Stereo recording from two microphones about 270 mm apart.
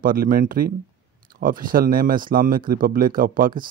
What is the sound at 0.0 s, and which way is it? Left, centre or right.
Speech, right.